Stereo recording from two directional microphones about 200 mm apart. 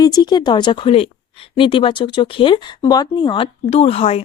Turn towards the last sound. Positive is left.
turn(degrees=30)  # may be behind; listen again after turning